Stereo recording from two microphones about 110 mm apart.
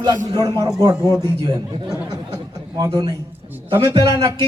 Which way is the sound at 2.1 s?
30° right (ahead or behind).